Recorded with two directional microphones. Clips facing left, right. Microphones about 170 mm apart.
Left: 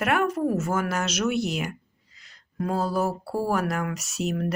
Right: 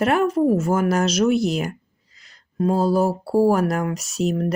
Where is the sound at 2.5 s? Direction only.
30° right (ahead or behind).